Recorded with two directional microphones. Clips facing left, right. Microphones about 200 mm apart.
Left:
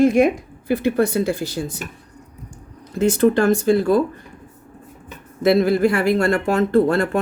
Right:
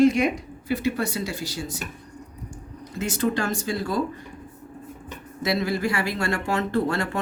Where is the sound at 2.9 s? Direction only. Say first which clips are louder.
Left 9 dB; 55° left (ahead or behind).